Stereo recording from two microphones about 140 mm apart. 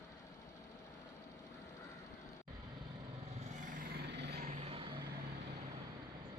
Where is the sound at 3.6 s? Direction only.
90° right; by 4.8 s 50° right (ahead or behind).